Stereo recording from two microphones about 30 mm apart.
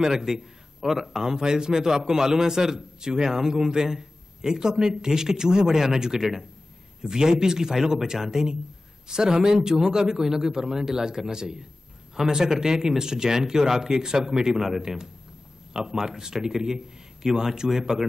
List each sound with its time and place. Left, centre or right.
0.0 s a man's voice: centre
1.2 s a man's voice: right